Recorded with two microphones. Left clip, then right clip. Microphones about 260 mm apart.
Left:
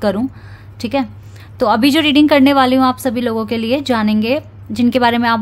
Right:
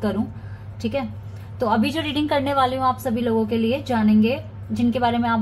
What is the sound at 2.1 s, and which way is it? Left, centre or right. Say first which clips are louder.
A woman's voice: left 12 dB; left.